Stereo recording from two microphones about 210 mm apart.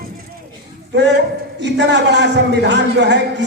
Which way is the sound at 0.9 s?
55° right (ahead or behind).